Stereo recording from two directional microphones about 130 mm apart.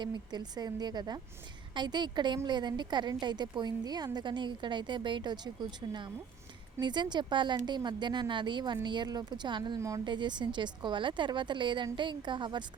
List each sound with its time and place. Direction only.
0.0 s a woman's voice: 35° right (ahead or behind)
6.7 s a woman's voice: 35° right (ahead or behind)